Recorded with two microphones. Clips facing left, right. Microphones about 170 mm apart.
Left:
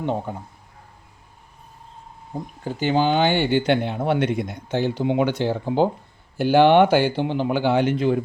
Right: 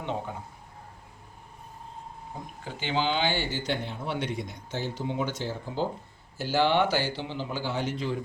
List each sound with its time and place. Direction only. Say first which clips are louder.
0.0 s speech: left 7 dB; 45° left (ahead or behind)
2.6 s speech: left 9 dB; 45° left (ahead or behind); by 8.2 s 60° left (ahead or behind)